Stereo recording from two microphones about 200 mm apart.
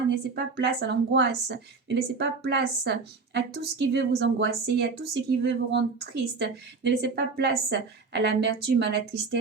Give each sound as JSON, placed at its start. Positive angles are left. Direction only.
{"t": 0.1, "sound": "a woman's voice", "side_deg": -60}